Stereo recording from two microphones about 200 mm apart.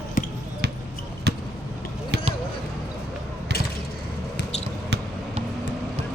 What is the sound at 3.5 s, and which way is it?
Vehicle, 55° right (ahead or behind).